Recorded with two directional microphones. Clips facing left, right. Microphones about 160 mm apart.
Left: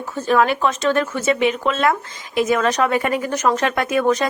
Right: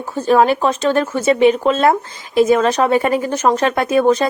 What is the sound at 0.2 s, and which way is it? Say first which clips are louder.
Speech: right 4 dB; 35° right (ahead or behind).